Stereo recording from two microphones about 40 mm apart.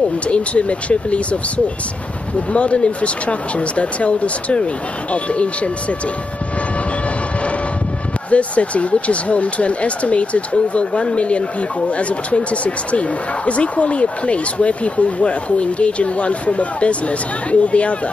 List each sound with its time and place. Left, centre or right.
0.3 s speech: left
2.5 s speech: left
8.3 s speech: left